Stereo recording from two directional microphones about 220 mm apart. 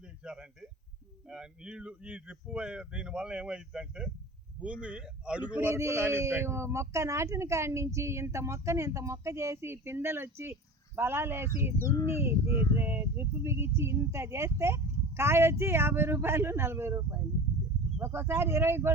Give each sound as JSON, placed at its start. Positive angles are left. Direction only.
{"t": 0.3, "sound": "a man's voice", "side_deg": -5}